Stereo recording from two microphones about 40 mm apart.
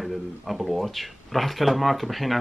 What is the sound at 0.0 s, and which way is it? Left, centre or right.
Speech, centre.